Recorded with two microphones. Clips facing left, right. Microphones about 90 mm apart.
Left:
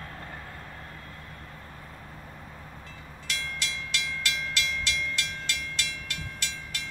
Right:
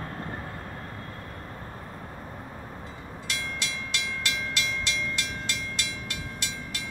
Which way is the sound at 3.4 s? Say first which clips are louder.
Right 1 dB; 20° right (ahead or behind).